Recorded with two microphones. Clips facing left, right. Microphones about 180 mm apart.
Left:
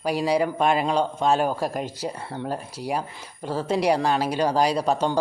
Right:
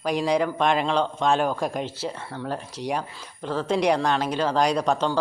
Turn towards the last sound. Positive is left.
turn(degrees=10)  # may be behind; listen again after turning